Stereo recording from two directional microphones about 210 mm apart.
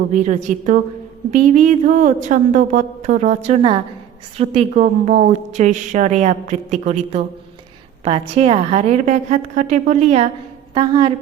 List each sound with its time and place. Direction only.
0.1 s a woman's voice: 35° right (ahead or behind)